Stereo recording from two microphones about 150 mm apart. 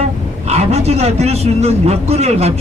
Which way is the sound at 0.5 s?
45° right (ahead or behind).